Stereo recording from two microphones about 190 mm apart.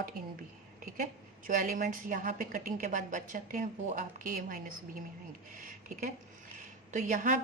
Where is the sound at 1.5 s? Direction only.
45° right (ahead or behind).